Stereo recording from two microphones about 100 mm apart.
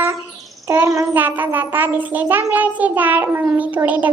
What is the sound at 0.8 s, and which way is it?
Child singing, 30° right (ahead or behind).